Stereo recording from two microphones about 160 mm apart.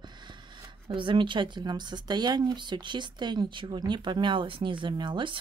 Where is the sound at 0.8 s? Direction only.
30° right (ahead or behind).